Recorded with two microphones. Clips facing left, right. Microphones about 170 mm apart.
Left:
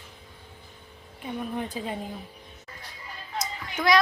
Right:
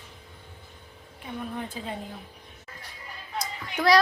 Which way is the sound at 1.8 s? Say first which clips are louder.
Left 3 dB; 20° left (ahead or behind).